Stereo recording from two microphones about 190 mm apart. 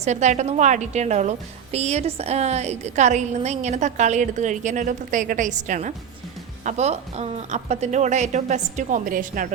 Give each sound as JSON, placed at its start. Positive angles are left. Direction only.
{"t": 0.0, "sound": "a woman's voice", "side_deg": -40}